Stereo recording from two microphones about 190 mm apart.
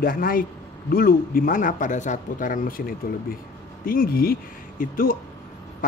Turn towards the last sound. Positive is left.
turn(degrees=50)  # may be behind; listen again after turning